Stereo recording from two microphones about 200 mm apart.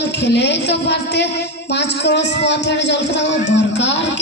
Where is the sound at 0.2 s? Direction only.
60° left (ahead or behind).